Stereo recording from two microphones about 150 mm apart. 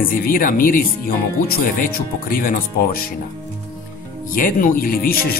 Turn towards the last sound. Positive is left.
turn(degrees=80)